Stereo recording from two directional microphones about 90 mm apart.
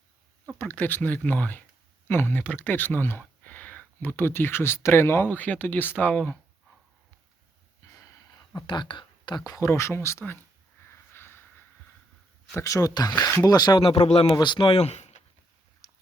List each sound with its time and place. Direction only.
0.6 s speech: 20° left (ahead or behind)
7.8 s a sound: 40° left (ahead or behind)
8.6 s speech: 60° left (ahead or behind)
9.5 s speech: 35° left (ahead or behind)
10.9 s a sound: 25° left (ahead or behind)
12.6 s speech: 40° left (ahead or behind)
13.7 s speech: 90° left
14.3 s speech: 55° left (ahead or behind)